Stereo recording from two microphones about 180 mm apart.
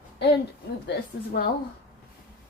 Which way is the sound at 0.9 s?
60° left (ahead or behind).